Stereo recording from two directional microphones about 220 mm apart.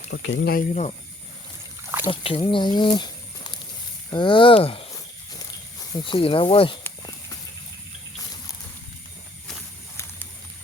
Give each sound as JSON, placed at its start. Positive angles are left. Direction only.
{"t": 0.1, "sound": "speech", "side_deg": 50}
{"t": 0.7, "sound": "speech", "side_deg": 30}
{"t": 2.0, "sound": "speech", "side_deg": 25}
{"t": 5.9, "sound": "speech", "side_deg": 20}
{"t": 6.8, "sound": "a sound", "side_deg": 15}